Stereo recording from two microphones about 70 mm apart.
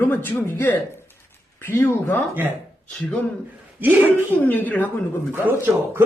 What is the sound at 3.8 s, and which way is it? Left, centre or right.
Speech, right.